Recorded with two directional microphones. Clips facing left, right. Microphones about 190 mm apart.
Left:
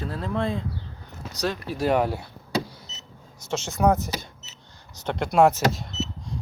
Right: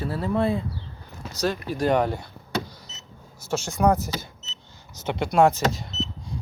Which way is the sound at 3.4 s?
10° right (ahead or behind).